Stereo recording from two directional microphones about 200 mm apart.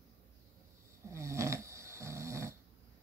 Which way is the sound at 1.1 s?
15° right (ahead or behind).